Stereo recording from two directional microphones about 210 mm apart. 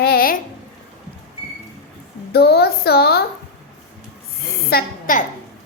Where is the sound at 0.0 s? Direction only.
45° left (ahead or behind).